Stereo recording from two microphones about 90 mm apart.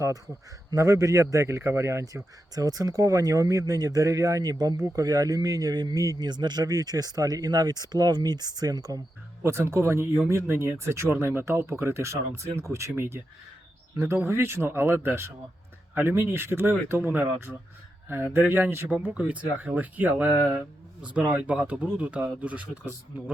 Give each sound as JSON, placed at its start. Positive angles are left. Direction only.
{"t": 0.7, "sound": "speech", "side_deg": -35}
{"t": 9.4, "sound": "speech", "side_deg": -30}